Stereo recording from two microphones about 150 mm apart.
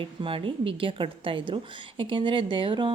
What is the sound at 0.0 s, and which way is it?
A woman's voice, 35° right (ahead or behind).